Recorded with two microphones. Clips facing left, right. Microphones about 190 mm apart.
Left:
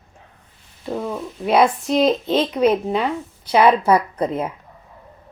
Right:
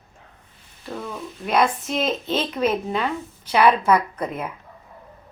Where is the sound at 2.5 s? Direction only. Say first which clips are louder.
Left 5 dB; 15° left (ahead or behind).